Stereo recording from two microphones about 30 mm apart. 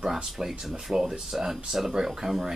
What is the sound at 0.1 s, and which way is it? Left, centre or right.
Speech, centre.